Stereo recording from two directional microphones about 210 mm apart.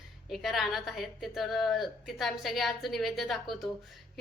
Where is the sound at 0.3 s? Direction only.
Centre (ahead or behind).